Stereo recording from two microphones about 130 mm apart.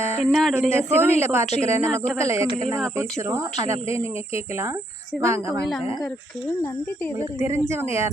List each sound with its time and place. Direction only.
0.2 s speech: centre (ahead or behind)
0.7 s speech: 20° right (ahead or behind)
5.2 s speech: 20° right (ahead or behind)
7.2 s speech: 25° right (ahead or behind)